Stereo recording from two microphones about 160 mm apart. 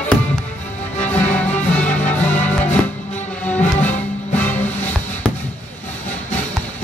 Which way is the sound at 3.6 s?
50° left (ahead or behind).